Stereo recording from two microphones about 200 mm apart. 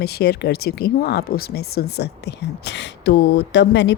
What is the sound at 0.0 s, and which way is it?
Speech, 55° left (ahead or behind).